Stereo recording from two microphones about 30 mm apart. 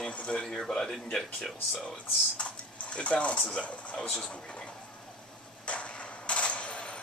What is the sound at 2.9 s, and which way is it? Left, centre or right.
Speech, left.